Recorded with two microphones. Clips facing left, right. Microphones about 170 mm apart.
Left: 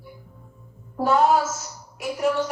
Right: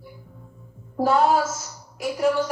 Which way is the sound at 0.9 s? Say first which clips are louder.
Even; 35° right (ahead or behind).